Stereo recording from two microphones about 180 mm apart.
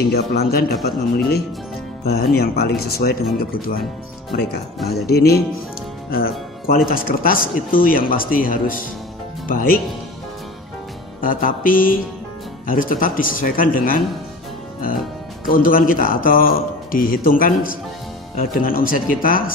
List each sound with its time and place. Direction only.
0.1 s speech: 60° left (ahead or behind)
4.8 s speech: 60° left (ahead or behind)
11.1 s speech: 50° left (ahead or behind)
15.4 s speech: 50° left (ahead or behind)